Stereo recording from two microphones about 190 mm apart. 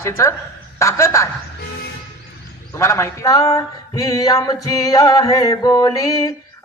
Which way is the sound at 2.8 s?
15° left (ahead or behind).